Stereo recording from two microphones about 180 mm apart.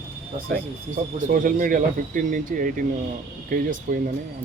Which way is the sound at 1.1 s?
50° right (ahead or behind).